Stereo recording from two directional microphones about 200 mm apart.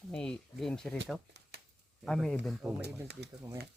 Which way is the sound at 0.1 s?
5° left (ahead or behind).